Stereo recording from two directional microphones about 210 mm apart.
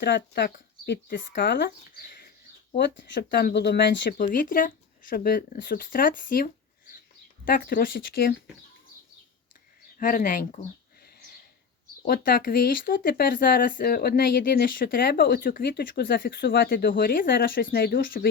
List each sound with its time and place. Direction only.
0.0 s speech: 55° left (ahead or behind)
4.2 s speech: 40° left (ahead or behind)
10.0 s speech: 35° left (ahead or behind)
12.0 s speech: 45° left (ahead or behind)